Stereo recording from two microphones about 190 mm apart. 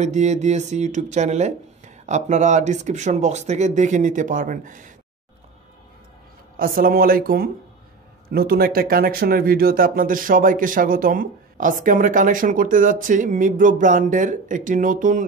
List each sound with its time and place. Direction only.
0.0 s speech: 35° right (ahead or behind)
6.5 s speech: 50° right (ahead or behind)